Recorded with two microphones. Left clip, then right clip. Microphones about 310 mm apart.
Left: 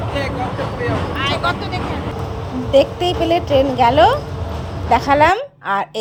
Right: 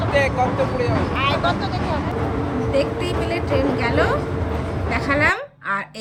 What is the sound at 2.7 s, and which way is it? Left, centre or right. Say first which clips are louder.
A woman's voice: left 9 dB; centre.